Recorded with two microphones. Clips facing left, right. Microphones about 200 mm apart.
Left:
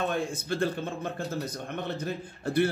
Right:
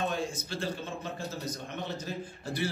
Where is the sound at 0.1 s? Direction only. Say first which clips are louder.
Left 4 dB; 55° left (ahead or behind).